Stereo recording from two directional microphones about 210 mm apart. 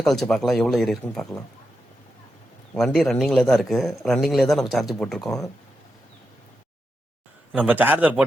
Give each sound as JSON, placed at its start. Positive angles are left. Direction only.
{"t": 0.0, "sound": "a man's voice", "side_deg": 0}
{"t": 2.7, "sound": "a man's voice", "side_deg": 0}
{"t": 7.5, "sound": "a man's voice", "side_deg": -10}